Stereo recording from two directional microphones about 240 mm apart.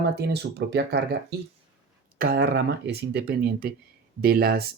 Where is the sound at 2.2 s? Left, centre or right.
Right.